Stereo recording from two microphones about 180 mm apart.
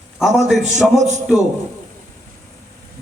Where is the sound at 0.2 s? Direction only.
Centre (ahead or behind).